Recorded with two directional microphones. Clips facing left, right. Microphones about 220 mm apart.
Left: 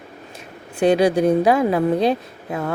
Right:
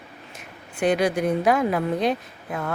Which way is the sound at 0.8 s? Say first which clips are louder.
Left 6 dB; 25° left (ahead or behind).